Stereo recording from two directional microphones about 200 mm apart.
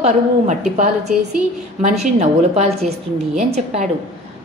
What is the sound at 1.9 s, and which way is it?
Speech, 35° right (ahead or behind).